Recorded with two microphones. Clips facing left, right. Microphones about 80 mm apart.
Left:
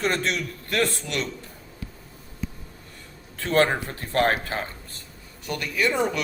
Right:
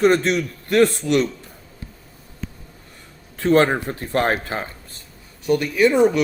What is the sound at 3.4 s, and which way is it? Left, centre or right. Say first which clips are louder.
A man's voice: right 5 dB; right.